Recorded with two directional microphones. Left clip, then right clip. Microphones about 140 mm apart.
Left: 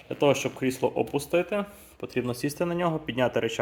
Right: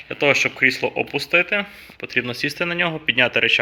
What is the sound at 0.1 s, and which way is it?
Speech, 20° left (ahead or behind).